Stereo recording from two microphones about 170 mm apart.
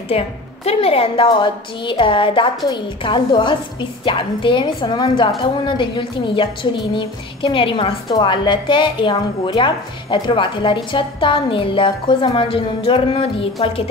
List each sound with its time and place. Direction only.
0.1 s a woman's voice: 35° left (ahead or behind)